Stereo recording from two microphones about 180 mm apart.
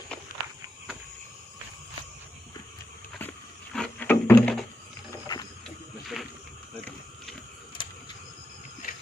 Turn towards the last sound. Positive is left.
turn(degrees=30)  # may be behind; listen again after turning